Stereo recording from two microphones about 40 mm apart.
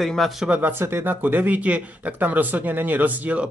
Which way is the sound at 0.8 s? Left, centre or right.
Right.